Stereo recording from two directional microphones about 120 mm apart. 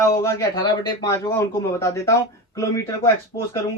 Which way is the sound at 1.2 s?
20° left (ahead or behind).